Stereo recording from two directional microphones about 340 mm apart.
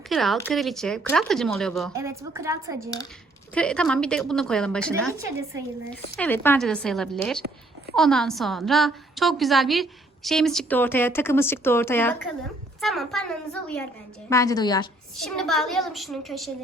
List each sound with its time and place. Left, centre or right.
0.1 s a woman's voice: centre
3.5 s a woman's voice: centre
15.2 s a woman's voice: centre